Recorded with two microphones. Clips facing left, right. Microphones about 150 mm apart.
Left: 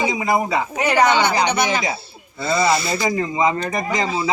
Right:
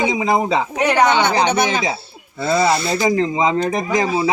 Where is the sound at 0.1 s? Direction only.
15° right (ahead or behind).